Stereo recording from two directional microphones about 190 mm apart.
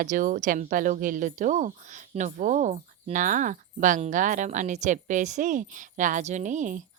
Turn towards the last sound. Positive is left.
turn(degrees=-40)  # may be behind; listen again after turning